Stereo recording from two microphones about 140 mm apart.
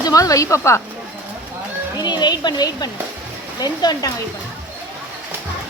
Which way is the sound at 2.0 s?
30° left (ahead or behind).